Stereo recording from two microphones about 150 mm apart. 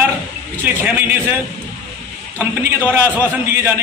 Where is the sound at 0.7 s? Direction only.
10° right (ahead or behind).